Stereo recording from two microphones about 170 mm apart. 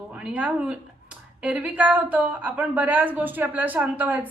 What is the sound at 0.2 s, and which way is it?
Speech, 5° right (ahead or behind).